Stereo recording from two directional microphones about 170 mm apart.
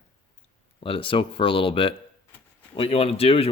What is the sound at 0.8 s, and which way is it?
A man's voice, 30° left (ahead or behind).